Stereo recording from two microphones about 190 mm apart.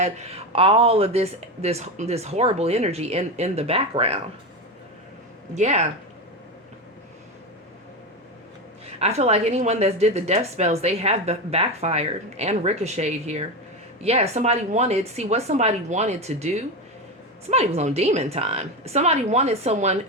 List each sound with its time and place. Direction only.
0.0 s a woman's voice: 35° right (ahead or behind)
5.5 s a woman's voice: 35° right (ahead or behind)
9.0 s a woman's voice: 35° right (ahead or behind)